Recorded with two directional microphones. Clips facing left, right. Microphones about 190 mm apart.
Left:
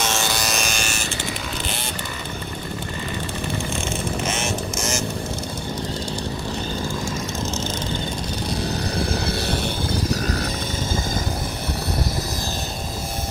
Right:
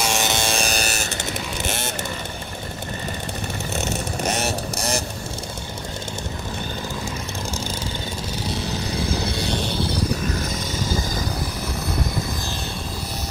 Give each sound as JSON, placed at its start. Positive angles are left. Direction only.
{"t": 0.0, "sound": "music", "side_deg": -15}
{"t": 4.2, "sound": "vehicle", "side_deg": -40}